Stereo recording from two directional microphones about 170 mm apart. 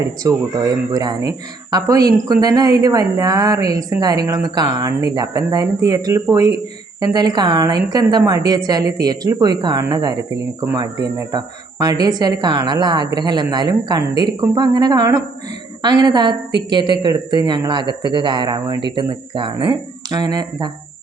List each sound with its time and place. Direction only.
0.2 s a woman's voice: 20° right (ahead or behind)